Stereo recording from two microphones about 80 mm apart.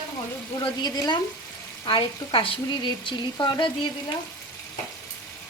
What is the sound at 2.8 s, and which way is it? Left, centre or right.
Frying, left.